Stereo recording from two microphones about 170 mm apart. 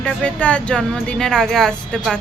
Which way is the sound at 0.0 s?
5° left (ahead or behind).